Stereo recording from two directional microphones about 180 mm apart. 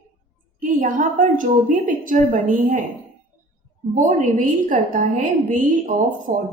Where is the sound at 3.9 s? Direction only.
45° right (ahead or behind).